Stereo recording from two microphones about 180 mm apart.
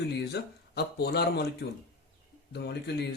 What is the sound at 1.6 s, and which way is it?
Speech, 75° left (ahead or behind).